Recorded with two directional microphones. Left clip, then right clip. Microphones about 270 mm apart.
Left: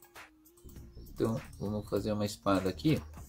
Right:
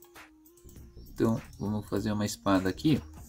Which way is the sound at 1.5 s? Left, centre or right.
Right.